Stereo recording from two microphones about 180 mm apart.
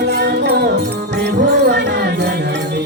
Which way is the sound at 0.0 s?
65° right (ahead or behind).